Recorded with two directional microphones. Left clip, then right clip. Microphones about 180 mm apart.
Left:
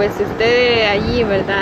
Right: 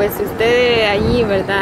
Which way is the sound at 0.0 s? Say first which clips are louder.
Even; 20° right (ahead or behind).